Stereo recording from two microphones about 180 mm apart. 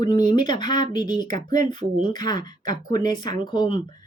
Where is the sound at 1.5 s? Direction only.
45° right (ahead or behind).